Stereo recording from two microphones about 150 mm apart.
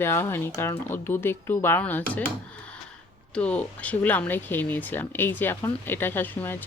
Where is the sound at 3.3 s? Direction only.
10° left (ahead or behind).